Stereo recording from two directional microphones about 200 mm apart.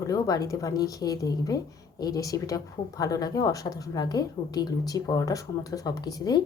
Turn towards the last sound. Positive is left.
turn(degrees=20)  # may be behind; listen again after turning